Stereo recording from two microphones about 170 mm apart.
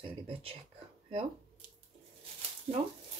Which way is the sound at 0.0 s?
35° right (ahead or behind).